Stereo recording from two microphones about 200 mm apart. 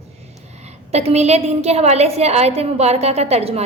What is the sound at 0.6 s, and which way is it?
A woman's voice, 30° right (ahead or behind).